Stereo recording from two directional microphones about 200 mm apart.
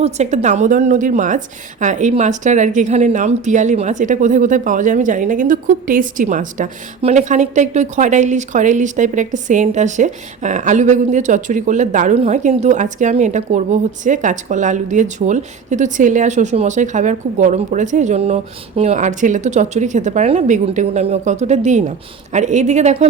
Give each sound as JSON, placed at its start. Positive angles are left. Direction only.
{"t": 0.0, "sound": "speech", "side_deg": -35}